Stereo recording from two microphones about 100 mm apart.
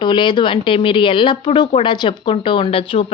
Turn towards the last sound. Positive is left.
turn(degrees=65)  # may be behind; listen again after turning